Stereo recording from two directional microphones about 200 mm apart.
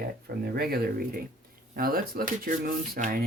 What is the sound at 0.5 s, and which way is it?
Speech, 50° right (ahead or behind).